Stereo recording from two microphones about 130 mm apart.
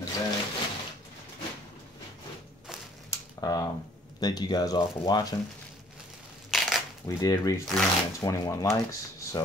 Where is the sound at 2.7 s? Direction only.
5° right (ahead or behind).